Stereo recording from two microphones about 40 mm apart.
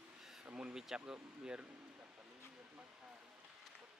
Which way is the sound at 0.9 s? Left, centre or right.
Centre.